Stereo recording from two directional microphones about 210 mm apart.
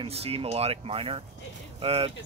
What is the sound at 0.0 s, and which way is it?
Speech, 30° right (ahead or behind).